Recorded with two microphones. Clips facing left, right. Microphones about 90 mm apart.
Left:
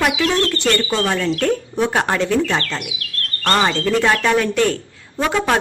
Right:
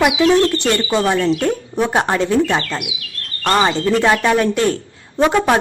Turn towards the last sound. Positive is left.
turn(degrees=-15)  # may be behind; listen again after turning